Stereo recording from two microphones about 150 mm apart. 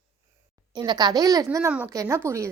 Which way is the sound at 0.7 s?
30° right (ahead or behind).